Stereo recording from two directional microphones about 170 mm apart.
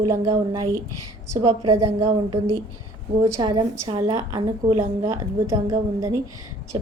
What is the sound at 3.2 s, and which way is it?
A woman's voice, 25° right (ahead or behind).